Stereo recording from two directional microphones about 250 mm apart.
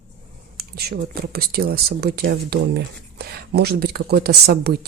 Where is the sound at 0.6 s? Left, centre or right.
Right.